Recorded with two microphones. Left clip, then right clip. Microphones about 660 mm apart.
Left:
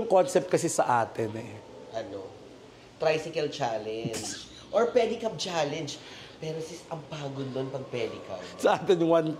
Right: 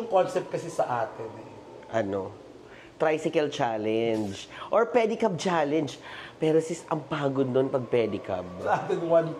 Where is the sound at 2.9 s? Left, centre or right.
Right.